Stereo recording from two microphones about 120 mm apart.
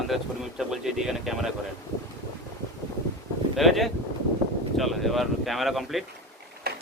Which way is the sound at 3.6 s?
Centre (ahead or behind).